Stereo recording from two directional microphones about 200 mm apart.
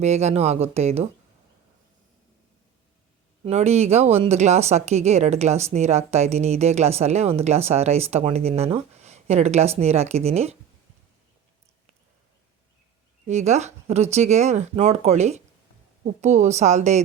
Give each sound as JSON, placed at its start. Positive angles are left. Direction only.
{"t": 0.0, "sound": "speech", "side_deg": -35}
{"t": 3.4, "sound": "speech", "side_deg": -35}
{"t": 13.2, "sound": "speech", "side_deg": -35}